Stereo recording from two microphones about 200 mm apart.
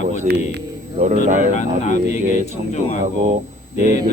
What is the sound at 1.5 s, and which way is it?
Speech, 35° left (ahead or behind).